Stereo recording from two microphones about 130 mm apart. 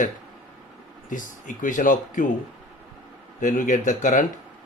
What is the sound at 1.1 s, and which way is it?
Speech, 85° left.